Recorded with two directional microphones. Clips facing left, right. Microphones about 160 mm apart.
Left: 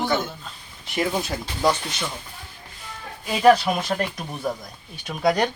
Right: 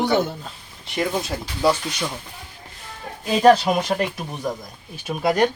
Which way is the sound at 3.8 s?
10° right (ahead or behind).